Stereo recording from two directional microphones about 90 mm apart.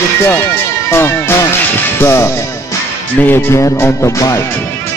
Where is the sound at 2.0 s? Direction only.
30° left (ahead or behind).